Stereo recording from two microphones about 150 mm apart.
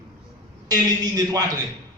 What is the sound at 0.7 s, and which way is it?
Speech, 25° right (ahead or behind).